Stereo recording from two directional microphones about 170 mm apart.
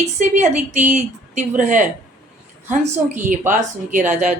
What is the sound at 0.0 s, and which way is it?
A woman's voice, 45° right (ahead or behind).